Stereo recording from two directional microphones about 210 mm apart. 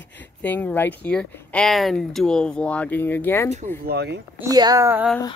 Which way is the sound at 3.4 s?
40° right (ahead or behind).